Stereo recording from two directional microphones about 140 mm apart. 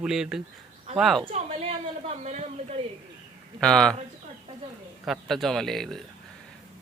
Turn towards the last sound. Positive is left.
turn(degrees=5)  # may be behind; listen again after turning